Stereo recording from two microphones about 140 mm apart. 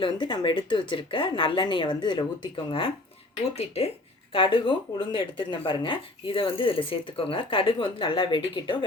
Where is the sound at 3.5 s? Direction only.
50° left (ahead or behind).